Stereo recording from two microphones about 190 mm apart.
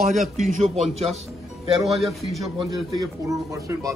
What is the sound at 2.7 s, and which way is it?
Speech, 15° right (ahead or behind).